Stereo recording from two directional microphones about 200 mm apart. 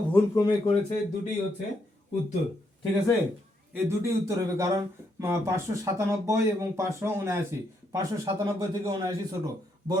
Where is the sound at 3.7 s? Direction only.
15° right (ahead or behind).